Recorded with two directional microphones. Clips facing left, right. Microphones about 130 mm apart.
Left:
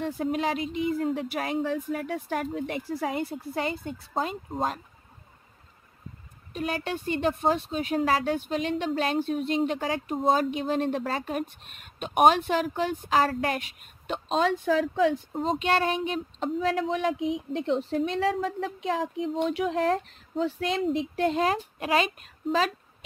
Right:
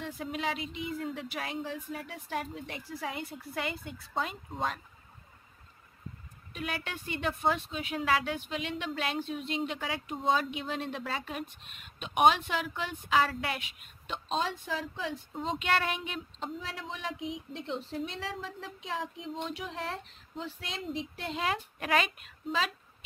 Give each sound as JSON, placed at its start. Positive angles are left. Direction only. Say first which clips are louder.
{"t": 0.0, "sound": "speech", "louder": "left 8 dB", "side_deg": 45}
{"t": 6.5, "sound": "speech", "louder": "left 7 dB", "side_deg": 40}
{"t": 14.3, "sound": "speech", "louder": "left 9 dB", "side_deg": 70}
{"t": 15.3, "sound": "speech", "louder": "left 5 dB", "side_deg": 40}
{"t": 16.3, "sound": "speech", "louder": "left 13 dB", "side_deg": 60}
{"t": 19.4, "sound": "speech", "louder": "left 13 dB", "side_deg": 65}
{"t": 21.7, "sound": "a woman's voice", "louder": "left 4 dB", "side_deg": 30}